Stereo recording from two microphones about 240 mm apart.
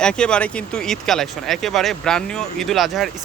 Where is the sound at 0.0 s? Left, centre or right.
Centre.